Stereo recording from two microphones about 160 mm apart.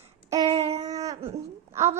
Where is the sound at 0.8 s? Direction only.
20° right (ahead or behind).